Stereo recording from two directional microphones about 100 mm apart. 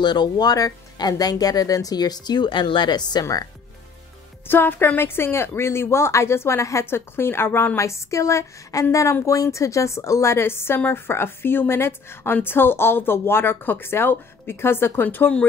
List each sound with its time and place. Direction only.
0.0 s speech: 45° left (ahead or behind)
4.5 s speech: 20° left (ahead or behind)